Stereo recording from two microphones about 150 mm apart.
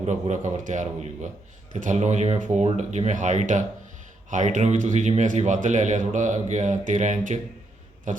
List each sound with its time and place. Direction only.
0.0 s speech: 50° right (ahead or behind)